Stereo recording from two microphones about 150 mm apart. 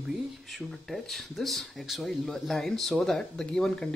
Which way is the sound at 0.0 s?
5° right (ahead or behind).